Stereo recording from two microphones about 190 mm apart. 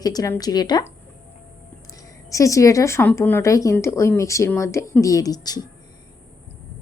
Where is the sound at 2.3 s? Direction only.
15° left (ahead or behind).